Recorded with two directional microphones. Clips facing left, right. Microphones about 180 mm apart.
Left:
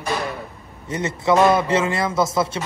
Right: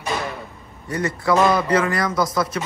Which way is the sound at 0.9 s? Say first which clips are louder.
Left 1 dB; 25° left (ahead or behind).